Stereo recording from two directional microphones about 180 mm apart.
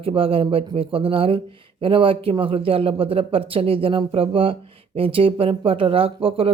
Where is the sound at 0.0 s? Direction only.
30° right (ahead or behind).